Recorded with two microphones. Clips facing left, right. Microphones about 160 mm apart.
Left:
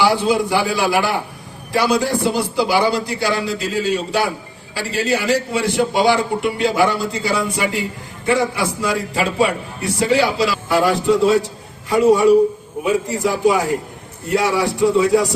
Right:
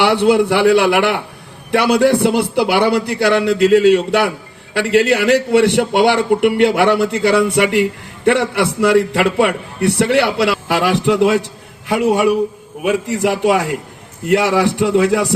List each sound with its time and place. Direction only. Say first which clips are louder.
0.0 s a man's voice: right 4 dB; 65° right (ahead or behind)